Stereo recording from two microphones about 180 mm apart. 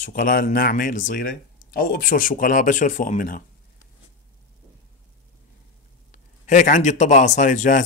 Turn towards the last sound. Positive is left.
turn(degrees=45)  # may be behind; listen again after turning